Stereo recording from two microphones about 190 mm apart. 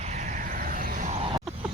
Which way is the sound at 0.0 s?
40° right (ahead or behind).